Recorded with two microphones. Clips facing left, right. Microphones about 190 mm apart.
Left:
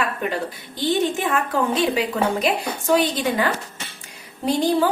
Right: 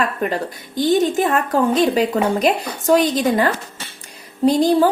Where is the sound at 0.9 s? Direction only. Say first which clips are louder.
Right 4 dB; 40° right (ahead or behind).